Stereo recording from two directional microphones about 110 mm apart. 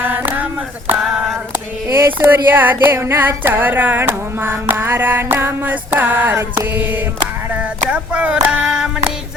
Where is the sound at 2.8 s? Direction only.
25° right (ahead or behind); by 8.9 s 5° right (ahead or behind).